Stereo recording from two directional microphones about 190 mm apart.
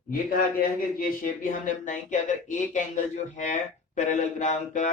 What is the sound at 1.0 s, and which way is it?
Speech, 45° left (ahead or behind).